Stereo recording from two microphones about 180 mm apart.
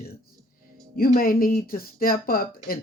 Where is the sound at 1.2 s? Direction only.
50° left (ahead or behind).